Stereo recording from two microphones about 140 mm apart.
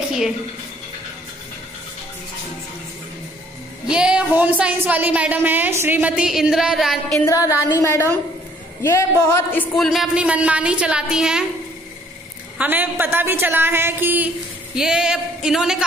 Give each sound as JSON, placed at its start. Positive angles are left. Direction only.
{"t": 3.8, "sound": "a woman's voice", "side_deg": -5}
{"t": 7.2, "sound": "a sound", "side_deg": 20}
{"t": 8.8, "sound": "speech", "side_deg": 15}
{"t": 9.8, "sound": "a woman's voice", "side_deg": 0}
{"t": 12.5, "sound": "a woman's voice", "side_deg": -15}